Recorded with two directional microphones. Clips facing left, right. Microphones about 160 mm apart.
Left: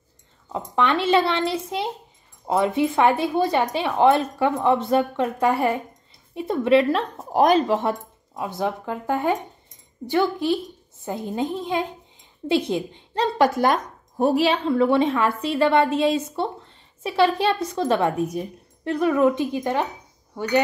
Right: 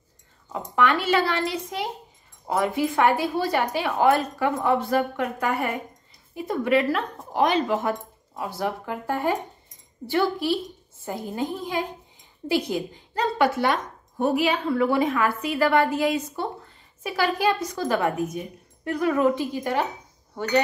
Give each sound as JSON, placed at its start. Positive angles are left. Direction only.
{"t": 0.5, "sound": "a woman's voice", "side_deg": 25}
{"t": 7.3, "sound": "speech", "side_deg": 40}
{"t": 8.4, "sound": "a woman's voice", "side_deg": 20}